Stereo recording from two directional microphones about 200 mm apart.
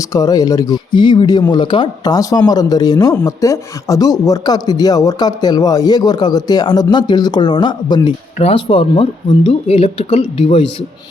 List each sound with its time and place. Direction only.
0.0 s speech: 15° left (ahead or behind)